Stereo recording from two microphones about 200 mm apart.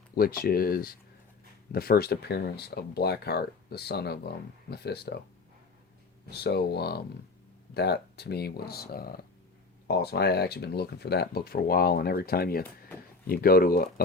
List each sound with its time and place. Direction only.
0.2 s speech: 50° left (ahead or behind)
6.3 s speech: 55° left (ahead or behind)